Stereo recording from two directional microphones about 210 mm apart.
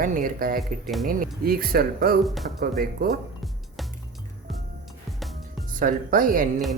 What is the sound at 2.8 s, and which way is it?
Speech, 45° right (ahead or behind).